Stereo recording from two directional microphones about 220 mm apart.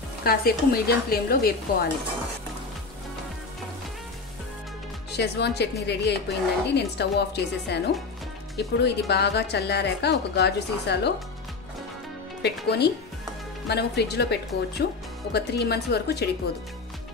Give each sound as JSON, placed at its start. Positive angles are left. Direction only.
{"t": 0.2, "sound": "a woman's voice", "side_deg": 40}
{"t": 5.1, "sound": "a woman's voice", "side_deg": 50}
{"t": 12.4, "sound": "a woman's voice", "side_deg": 50}